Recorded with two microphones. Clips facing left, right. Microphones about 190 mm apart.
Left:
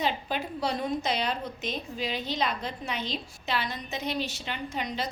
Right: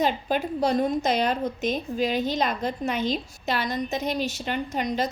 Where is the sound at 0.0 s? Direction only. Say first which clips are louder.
Right 6 dB; 45° right (ahead or behind).